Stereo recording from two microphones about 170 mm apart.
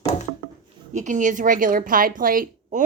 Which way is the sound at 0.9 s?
45° right (ahead or behind).